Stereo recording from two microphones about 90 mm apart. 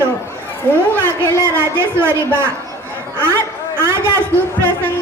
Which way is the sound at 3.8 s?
25° right (ahead or behind).